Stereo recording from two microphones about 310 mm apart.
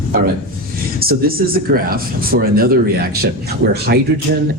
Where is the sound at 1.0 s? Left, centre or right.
Right.